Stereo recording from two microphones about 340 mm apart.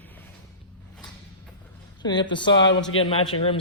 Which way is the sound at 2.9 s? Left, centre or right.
Left.